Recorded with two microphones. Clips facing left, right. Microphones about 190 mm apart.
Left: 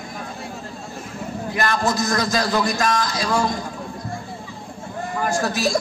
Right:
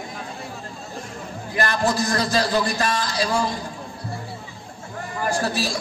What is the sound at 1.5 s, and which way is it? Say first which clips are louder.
A man's voice: even; 35° right (ahead or behind).